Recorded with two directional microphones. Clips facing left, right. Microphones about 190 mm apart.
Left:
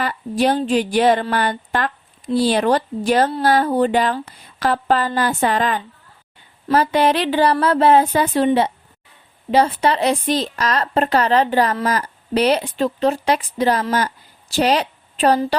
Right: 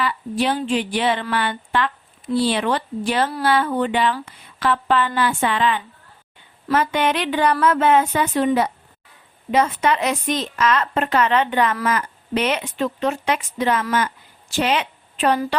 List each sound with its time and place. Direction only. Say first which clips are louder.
0.0 s a woman's voice: left 3 dB; 45° left (ahead or behind)